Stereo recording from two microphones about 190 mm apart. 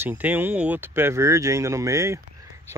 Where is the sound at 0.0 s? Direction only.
10° right (ahead or behind).